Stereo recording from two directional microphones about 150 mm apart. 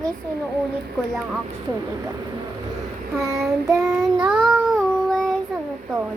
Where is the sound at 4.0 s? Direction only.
Centre (ahead or behind).